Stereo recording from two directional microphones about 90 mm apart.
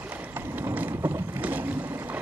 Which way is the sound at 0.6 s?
25° right (ahead or behind).